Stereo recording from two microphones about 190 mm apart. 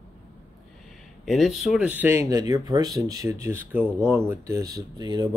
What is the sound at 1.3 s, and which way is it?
Speech, centre (ahead or behind).